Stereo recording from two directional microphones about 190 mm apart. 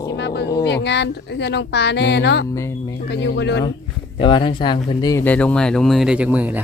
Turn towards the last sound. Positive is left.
turn(degrees=-10)  # may be behind; listen again after turning